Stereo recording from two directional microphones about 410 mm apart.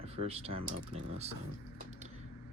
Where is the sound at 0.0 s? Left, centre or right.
Centre.